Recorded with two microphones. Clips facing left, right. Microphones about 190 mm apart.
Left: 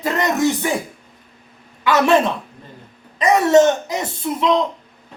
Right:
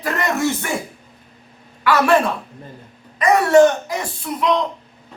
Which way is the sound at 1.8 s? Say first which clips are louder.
Left 1 dB; 20° left (ahead or behind).